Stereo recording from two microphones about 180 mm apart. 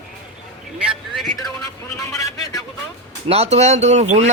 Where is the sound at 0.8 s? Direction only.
Centre (ahead or behind).